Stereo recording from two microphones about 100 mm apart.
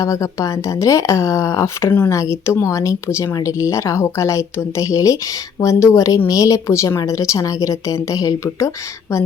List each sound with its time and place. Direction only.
0.0 s speech: 35° left (ahead or behind)